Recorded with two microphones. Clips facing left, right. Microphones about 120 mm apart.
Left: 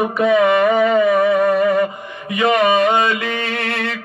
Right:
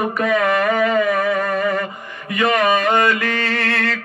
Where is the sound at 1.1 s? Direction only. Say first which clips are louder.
Left 5 dB; 20° left (ahead or behind).